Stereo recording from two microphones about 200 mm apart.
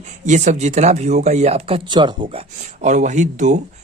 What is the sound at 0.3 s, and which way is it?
Speech, 35° right (ahead or behind).